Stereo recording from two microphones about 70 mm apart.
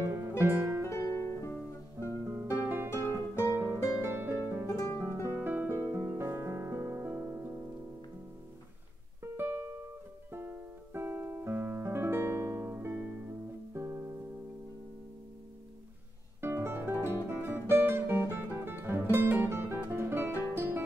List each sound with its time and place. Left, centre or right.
0.0 s music: right
0.8 s music: left
2.0 s music: right
3.5 s music: right
4.0 s harp: right
4.6 s music: left
5.0 s music: right
9.2 s music: right
12.7 s music: right
13.7 s music: right
16.3 s music: right
17.0 s guitar: right